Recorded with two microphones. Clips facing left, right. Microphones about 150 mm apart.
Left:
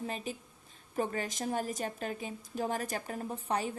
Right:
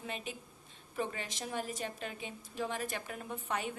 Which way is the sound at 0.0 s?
35° left (ahead or behind).